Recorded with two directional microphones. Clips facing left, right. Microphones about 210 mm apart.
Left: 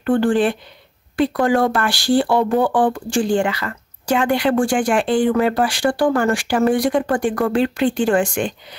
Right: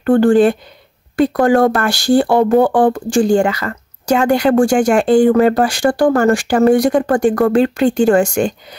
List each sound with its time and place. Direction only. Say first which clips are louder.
0.1 s speech: right 6 dB; 45° right (ahead or behind)